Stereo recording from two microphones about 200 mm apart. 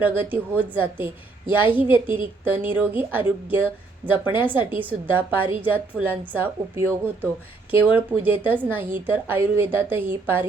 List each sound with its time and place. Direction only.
0.0 s speech: 10° right (ahead or behind)